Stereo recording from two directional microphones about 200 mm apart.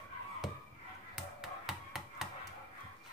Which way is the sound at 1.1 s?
Centre (ahead or behind).